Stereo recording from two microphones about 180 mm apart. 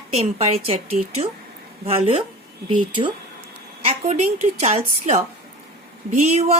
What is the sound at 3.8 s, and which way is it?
A woman's voice, 35° right (ahead or behind).